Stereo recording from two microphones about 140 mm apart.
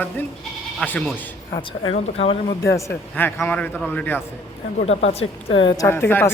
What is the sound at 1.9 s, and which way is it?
Speech, 45° left (ahead or behind).